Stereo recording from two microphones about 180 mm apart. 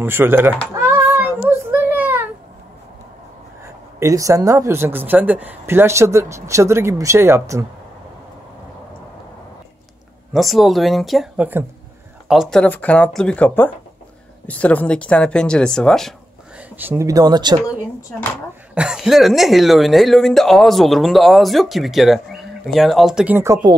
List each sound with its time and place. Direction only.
0.0 s speech: 10° right (ahead or behind)
0.7 s child singing: 10° right (ahead or behind)
4.0 s speech: 15° right (ahead or behind)
10.3 s speech: centre (ahead or behind)
16.7 s speech: 10° right (ahead or behind)
18.8 s speech: 5° right (ahead or behind); by 23.8 s 20° right (ahead or behind)